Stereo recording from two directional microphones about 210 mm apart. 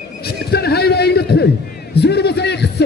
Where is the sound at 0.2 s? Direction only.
50° left (ahead or behind).